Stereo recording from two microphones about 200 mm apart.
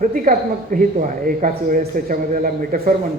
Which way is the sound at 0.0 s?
45° right (ahead or behind).